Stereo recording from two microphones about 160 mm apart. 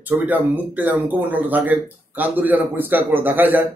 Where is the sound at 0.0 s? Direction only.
10° right (ahead or behind).